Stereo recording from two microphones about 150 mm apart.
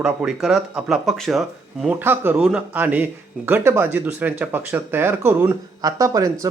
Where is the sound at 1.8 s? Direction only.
10° right (ahead or behind).